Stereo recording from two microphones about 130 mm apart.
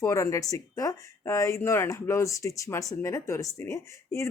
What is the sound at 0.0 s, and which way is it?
Speech, 25° left (ahead or behind).